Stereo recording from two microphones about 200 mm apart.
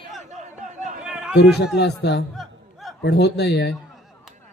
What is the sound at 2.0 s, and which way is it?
Speech, 60° left (ahead or behind).